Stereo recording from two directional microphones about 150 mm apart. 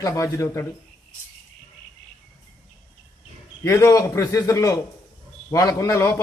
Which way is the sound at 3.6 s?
20° left (ahead or behind).